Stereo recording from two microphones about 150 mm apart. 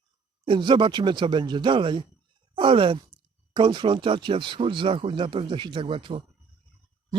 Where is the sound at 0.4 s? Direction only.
35° right (ahead or behind).